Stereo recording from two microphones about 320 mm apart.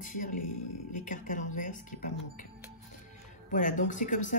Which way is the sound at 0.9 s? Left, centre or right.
Left.